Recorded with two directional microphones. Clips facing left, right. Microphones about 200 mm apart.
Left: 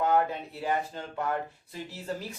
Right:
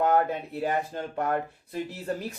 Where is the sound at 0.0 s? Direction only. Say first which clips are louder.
Right 2 dB; 55° right (ahead or behind).